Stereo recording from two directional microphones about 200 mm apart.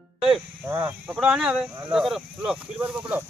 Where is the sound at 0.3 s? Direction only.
5° right (ahead or behind).